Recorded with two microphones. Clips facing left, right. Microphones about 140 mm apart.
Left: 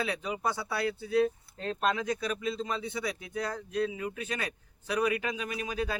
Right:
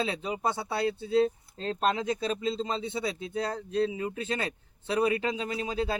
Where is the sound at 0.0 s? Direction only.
25° right (ahead or behind).